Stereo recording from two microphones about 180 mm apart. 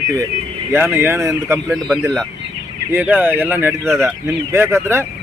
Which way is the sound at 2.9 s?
10° right (ahead or behind).